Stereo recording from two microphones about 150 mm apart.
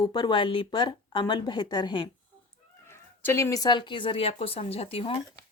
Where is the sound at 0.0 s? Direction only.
30° left (ahead or behind).